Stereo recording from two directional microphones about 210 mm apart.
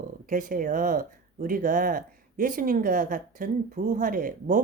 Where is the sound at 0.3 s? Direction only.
40° right (ahead or behind).